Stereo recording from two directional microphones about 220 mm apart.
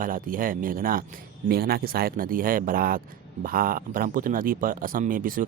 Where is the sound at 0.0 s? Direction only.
40° right (ahead or behind).